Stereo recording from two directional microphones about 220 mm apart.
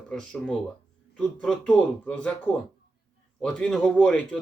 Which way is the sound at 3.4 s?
5° left (ahead or behind).